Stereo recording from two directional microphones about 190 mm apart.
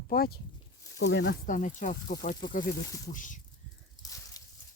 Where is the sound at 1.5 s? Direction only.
40° left (ahead or behind).